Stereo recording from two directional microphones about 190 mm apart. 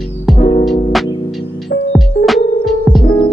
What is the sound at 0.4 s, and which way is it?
Music, 25° left (ahead or behind).